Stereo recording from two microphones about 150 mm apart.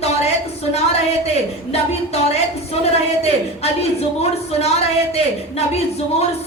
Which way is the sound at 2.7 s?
45° left (ahead or behind).